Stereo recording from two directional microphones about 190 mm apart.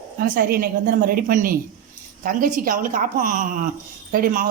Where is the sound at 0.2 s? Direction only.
50° right (ahead or behind).